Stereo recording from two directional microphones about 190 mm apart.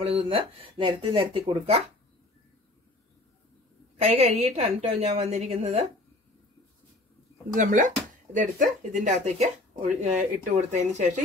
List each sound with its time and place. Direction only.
0.0 s speech: 30° right (ahead or behind)
4.0 s speech: 35° right (ahead or behind)
7.5 s speech: 40° right (ahead or behind)